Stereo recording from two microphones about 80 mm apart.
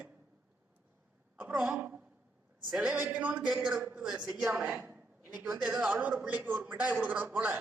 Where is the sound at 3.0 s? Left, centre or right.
Centre.